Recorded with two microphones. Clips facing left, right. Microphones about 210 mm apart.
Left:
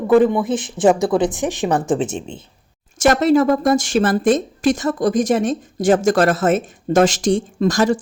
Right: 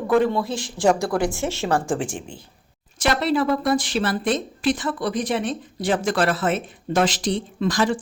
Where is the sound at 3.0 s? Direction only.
45° left (ahead or behind).